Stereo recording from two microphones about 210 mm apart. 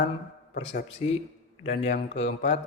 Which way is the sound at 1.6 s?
30° left (ahead or behind).